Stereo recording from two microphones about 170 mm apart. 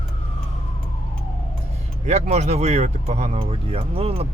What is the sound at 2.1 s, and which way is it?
Speech, 40° right (ahead or behind).